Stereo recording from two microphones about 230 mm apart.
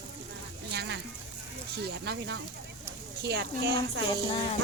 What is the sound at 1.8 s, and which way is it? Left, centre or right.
A woman's voice, right.